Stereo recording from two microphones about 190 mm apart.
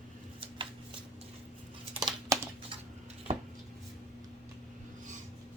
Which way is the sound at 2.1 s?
25° right (ahead or behind).